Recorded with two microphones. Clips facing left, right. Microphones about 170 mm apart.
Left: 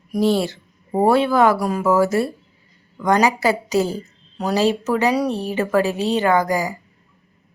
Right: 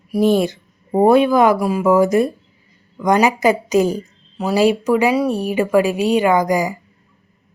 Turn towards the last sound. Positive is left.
turn(degrees=-15)  # may be behind; listen again after turning